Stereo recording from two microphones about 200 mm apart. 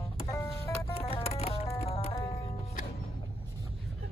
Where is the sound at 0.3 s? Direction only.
15° left (ahead or behind).